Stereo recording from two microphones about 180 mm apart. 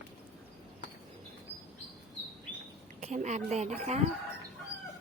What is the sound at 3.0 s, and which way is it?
Speech, 40° right (ahead or behind).